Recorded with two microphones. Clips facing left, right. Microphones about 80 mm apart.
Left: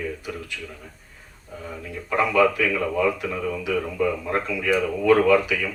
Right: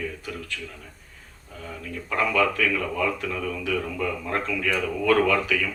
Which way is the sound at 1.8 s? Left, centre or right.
Centre.